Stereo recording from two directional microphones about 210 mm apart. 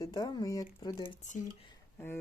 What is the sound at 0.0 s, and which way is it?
Speech, 20° left (ahead or behind).